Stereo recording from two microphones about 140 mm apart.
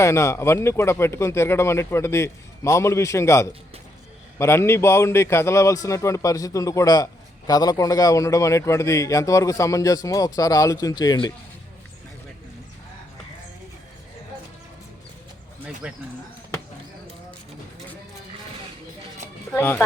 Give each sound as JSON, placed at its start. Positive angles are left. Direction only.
{"t": 0.0, "sound": "a man's voice", "side_deg": 20}
{"t": 15.6, "sound": "speech", "side_deg": -10}
{"t": 19.5, "sound": "speech", "side_deg": 15}